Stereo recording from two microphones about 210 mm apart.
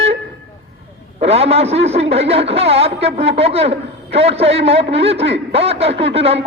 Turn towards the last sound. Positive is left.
turn(degrees=-30)  # may be behind; listen again after turning